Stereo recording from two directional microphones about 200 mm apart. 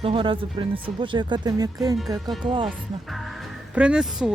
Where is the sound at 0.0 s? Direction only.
25° right (ahead or behind).